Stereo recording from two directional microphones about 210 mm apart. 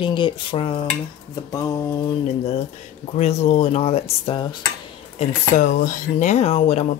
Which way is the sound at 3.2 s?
30° left (ahead or behind).